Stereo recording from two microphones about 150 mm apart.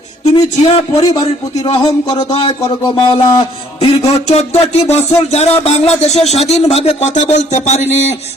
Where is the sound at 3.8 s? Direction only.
45° left (ahead or behind).